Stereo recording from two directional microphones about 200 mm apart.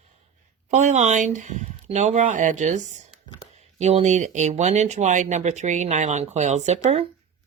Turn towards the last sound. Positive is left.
turn(degrees=-30)  # may be behind; listen again after turning